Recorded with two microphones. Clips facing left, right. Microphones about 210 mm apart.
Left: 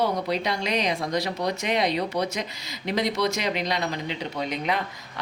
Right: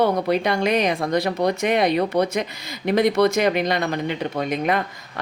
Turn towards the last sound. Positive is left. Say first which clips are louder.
# right 5 dB
turn(degrees=-55)  # may be behind; listen again after turning